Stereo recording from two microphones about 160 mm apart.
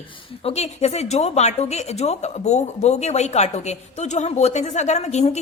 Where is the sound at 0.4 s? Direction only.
40° left (ahead or behind).